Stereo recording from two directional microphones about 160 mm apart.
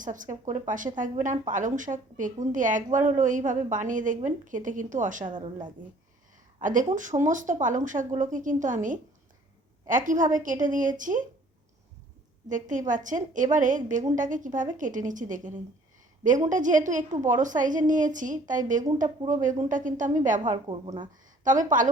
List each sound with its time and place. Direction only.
0.0 s a woman's voice: 55° right (ahead or behind)
5.2 s a woman's voice: 30° right (ahead or behind)
6.6 s a woman's voice: 55° right (ahead or behind)
12.5 s a woman's voice: 50° right (ahead or behind)
20.7 s speech: 30° right (ahead or behind)
21.4 s a woman's voice: 50° right (ahead or behind)